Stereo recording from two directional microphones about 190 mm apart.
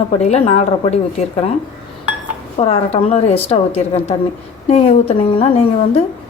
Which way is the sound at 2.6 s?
35° left (ahead or behind).